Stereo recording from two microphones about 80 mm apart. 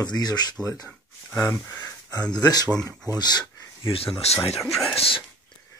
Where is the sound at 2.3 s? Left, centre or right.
Left.